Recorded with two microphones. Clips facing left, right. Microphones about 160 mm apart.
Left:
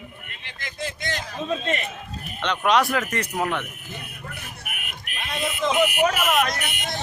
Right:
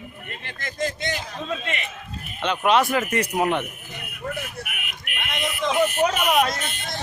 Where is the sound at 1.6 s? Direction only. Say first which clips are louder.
Left 4 dB; 40° left (ahead or behind).